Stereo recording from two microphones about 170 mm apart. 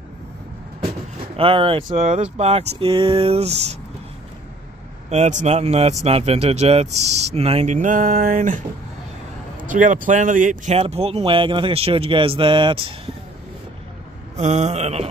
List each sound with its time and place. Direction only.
1.3 s speech: 30° right (ahead or behind)
5.1 s speech: 45° right (ahead or behind)
9.7 s speech: 50° right (ahead or behind); by 13.1 s 30° right (ahead or behind)
14.3 s speech: 40° right (ahead or behind)